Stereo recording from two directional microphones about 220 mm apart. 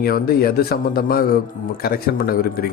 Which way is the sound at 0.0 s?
45° left (ahead or behind).